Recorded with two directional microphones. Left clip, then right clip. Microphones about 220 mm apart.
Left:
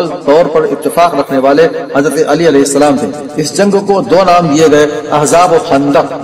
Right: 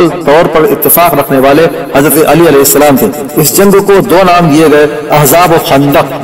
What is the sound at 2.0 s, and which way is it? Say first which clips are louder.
Speech: right 5 dB; 30° right (ahead or behind).